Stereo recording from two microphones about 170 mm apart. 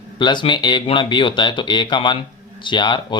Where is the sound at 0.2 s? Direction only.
25° left (ahead or behind).